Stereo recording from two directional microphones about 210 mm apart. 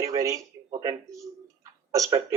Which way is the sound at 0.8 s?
15° right (ahead or behind).